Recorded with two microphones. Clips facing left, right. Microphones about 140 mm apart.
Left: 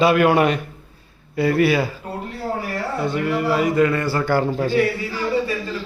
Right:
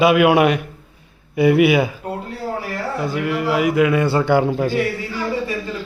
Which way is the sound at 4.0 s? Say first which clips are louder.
Right 4 dB; 20° right (ahead or behind).